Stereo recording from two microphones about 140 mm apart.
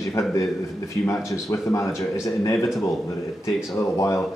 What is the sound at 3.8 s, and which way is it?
Speech, 20° left (ahead or behind).